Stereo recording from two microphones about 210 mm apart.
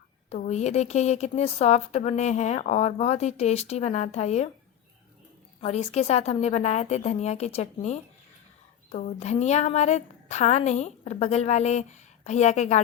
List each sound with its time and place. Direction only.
0.3 s a woman's voice: 30° left (ahead or behind)
5.5 s a woman's voice: 30° left (ahead or behind)